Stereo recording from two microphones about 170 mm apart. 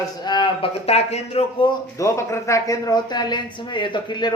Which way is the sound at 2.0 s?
15° left (ahead or behind).